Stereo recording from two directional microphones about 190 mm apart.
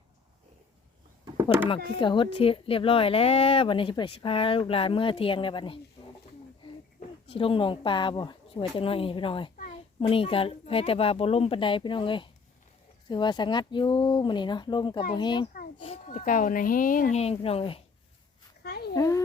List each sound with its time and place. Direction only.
1.2 s a sound: 15° right (ahead or behind)
2.0 s speech: 25° left (ahead or behind)
7.3 s speech: 30° left (ahead or behind)
15.8 s speech: 35° left (ahead or behind)
18.6 s a sound: 55° left (ahead or behind)
18.9 s speech: 15° left (ahead or behind)